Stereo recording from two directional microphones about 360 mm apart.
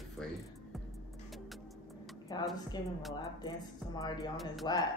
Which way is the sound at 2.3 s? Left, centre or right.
Centre.